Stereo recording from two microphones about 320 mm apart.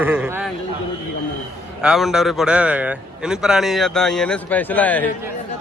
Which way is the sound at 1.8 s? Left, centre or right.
Centre.